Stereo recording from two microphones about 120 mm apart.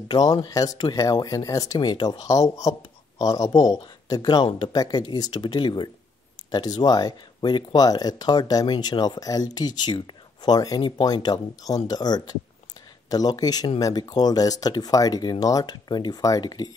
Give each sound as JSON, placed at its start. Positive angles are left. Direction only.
{"t": 0.1, "sound": "speech", "side_deg": 35}